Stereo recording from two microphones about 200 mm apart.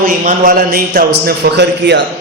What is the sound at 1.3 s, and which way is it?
Speech, 60° right (ahead or behind).